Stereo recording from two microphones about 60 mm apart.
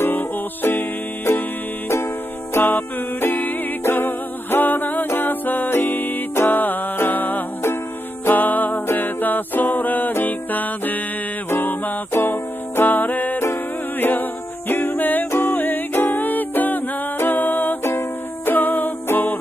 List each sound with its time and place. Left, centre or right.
0.0 s music: left
2.5 s music: left